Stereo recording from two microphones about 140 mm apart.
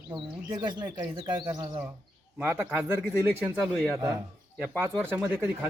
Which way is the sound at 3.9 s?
20° right (ahead or behind).